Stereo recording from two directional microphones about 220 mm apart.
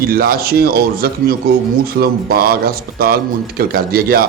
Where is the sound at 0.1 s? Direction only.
45° right (ahead or behind).